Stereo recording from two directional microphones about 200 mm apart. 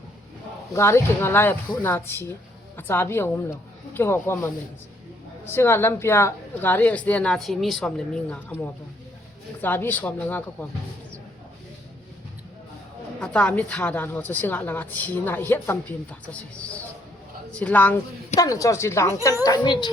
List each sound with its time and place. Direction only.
0.7 s a woman's voice: 15° left (ahead or behind)
9.6 s a woman's voice: 10° left (ahead or behind)
13.1 s a woman's voice: 5° left (ahead or behind); by 19.9 s 20° left (ahead or behind)